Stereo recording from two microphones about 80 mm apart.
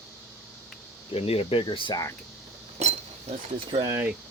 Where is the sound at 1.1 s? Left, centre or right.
Left.